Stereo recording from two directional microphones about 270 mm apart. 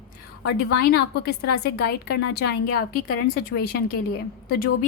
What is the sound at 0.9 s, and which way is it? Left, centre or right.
A woman's voice, left.